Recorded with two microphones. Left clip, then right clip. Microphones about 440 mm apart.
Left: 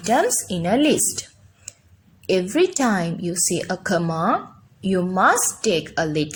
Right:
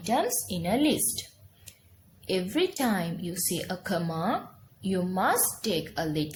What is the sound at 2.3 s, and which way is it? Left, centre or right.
Speech, left.